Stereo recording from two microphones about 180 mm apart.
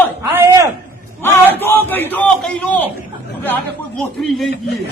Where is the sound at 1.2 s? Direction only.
10° left (ahead or behind).